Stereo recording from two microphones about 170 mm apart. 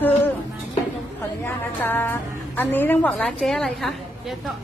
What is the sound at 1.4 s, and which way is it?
A woman's voice, 10° left (ahead or behind).